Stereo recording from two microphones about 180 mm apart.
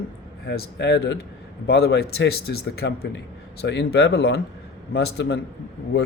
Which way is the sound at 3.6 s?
75° left (ahead or behind).